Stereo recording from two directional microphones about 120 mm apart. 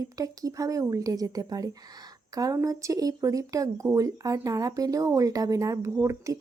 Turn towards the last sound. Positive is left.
turn(degrees=-25)  # may be behind; listen again after turning